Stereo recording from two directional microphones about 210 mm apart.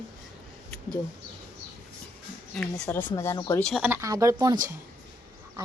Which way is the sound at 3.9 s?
15° right (ahead or behind).